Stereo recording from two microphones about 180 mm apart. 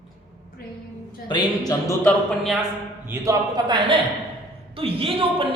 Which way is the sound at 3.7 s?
25° right (ahead or behind).